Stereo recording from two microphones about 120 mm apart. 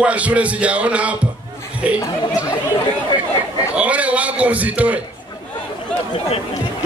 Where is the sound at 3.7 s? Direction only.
10° right (ahead or behind).